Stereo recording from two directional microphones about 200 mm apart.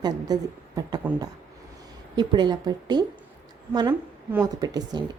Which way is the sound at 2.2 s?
20° right (ahead or behind).